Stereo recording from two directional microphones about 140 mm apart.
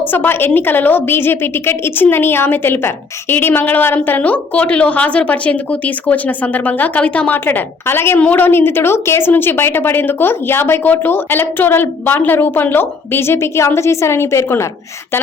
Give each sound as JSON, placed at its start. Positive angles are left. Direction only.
{"t": 0.1, "sound": "a woman's voice", "side_deg": 15}